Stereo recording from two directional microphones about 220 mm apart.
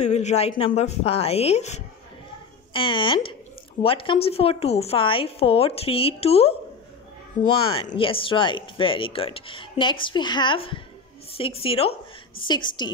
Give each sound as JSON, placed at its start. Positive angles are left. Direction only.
{"t": 0.0, "sound": "speech", "side_deg": 30}
{"t": 7.6, "sound": "speech", "side_deg": 25}